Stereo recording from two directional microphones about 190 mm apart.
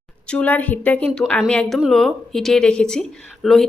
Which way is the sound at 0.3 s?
5° left (ahead or behind).